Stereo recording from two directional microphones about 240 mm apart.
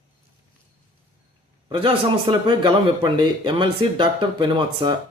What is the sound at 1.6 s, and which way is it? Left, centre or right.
A man's voice, right.